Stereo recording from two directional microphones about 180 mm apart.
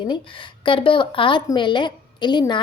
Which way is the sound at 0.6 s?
30° left (ahead or behind).